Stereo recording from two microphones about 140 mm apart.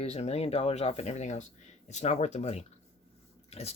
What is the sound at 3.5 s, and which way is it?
Biting, 45° left (ahead or behind).